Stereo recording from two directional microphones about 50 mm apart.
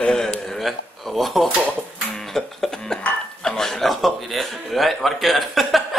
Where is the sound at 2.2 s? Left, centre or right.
Centre.